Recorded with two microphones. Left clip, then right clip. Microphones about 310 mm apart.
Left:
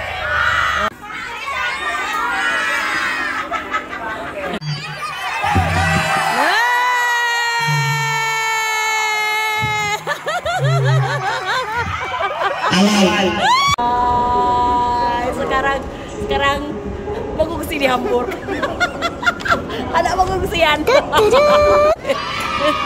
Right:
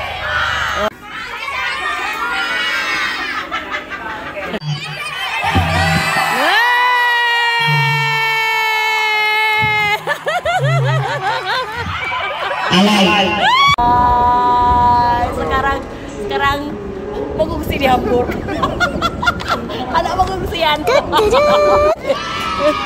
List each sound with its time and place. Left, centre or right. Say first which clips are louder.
0.7 s crowd: even; centre
6.4 s music: right 4 dB; centre
12.7 s chuckle: right 5 dB; right
13.4 s a sound: right 2 dB; centre
17.4 s music: right 1 dB; centre
18.5 s hubbub: even; centre
20.8 s speech: even; centre